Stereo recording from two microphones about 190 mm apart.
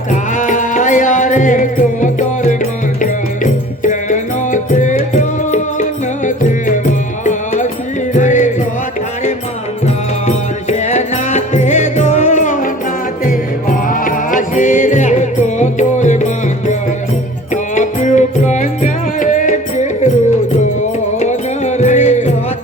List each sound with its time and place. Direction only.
0.1 s music: 40° left (ahead or behind)
9.8 s music: 35° left (ahead or behind)
21.2 s music: 35° left (ahead or behind)